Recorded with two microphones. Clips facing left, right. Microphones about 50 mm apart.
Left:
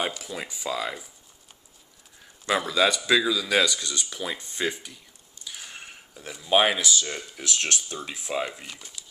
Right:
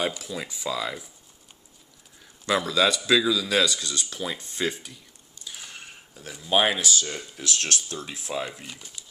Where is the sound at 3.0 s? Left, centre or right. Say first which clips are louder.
Right 1 dB; centre.